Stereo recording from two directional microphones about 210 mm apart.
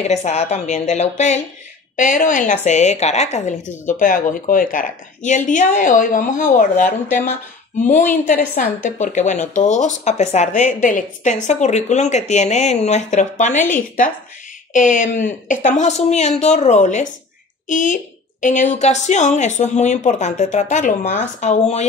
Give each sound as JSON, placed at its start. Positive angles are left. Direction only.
{"t": 0.0, "sound": "a woman's voice", "side_deg": 30}